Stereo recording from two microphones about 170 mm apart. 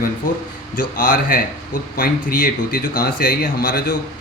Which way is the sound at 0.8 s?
50° left (ahead or behind).